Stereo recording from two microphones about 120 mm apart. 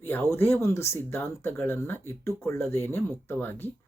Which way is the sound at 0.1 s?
20° left (ahead or behind).